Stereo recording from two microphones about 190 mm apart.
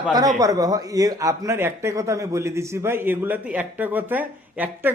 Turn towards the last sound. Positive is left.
turn(degrees=-10)  # may be behind; listen again after turning